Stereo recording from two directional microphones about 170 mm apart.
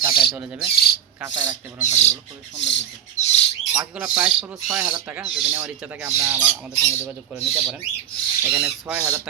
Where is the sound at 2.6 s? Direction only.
90° left.